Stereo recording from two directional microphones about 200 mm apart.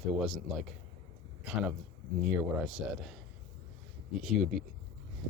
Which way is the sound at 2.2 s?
5° right (ahead or behind).